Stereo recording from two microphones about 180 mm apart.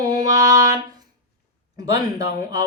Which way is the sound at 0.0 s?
20° right (ahead or behind).